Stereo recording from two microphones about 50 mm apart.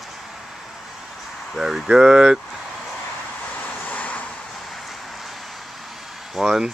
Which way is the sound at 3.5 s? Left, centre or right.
Left.